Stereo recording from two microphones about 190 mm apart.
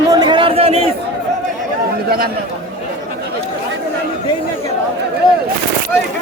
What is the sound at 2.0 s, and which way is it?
Speech, 50° right (ahead or behind).